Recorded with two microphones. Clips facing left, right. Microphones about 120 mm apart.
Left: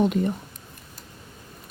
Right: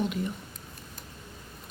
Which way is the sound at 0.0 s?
45° left (ahead or behind).